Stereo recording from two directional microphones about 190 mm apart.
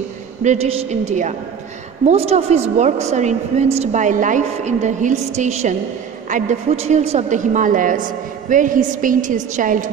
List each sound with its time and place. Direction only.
0.4 s a woman's voice: 35° right (ahead or behind)